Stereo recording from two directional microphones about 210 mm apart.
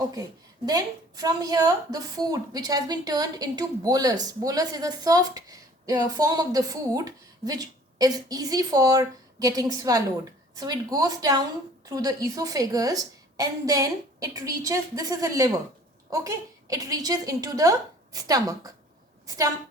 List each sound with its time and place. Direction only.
0.1 s a woman's voice: 15° right (ahead or behind)